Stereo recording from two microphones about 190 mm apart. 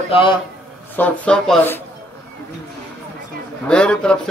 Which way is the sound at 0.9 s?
5° left (ahead or behind).